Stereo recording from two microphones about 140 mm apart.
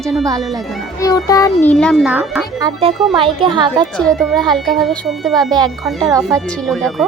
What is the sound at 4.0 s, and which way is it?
Speech, 5° left (ahead or behind).